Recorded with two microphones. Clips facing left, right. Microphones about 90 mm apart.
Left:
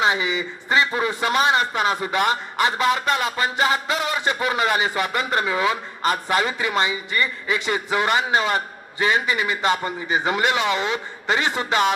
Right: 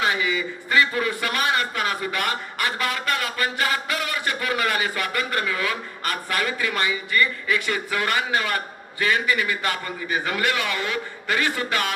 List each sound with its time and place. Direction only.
0.0 s a man's voice: 20° left (ahead or behind)